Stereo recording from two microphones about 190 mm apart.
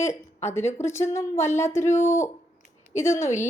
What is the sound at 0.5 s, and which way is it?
A woman's voice, 15° left (ahead or behind).